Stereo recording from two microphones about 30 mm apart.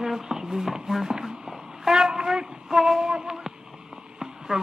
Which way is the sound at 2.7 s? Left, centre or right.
Centre.